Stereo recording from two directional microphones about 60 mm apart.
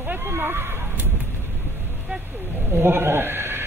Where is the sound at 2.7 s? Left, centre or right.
Right.